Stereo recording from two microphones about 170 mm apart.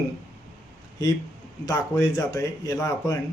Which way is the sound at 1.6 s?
20° left (ahead or behind).